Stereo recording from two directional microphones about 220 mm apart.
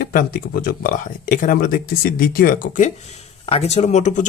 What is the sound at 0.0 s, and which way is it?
Speech, 40° left (ahead or behind).